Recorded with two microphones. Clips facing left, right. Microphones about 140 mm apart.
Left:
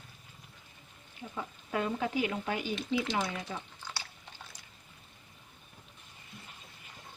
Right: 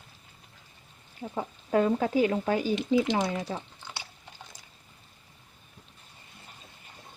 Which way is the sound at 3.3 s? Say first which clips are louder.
Right 6 dB; 35° right (ahead or behind).